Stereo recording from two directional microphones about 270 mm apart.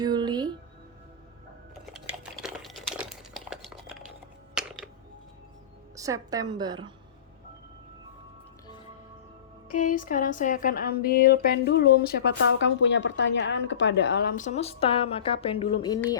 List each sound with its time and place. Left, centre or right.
0.0 s music: centre
2.4 s a sound: centre
4.6 s music: centre
6.0 s a woman's voice: centre
9.7 s speech: left; by 16.1 s centre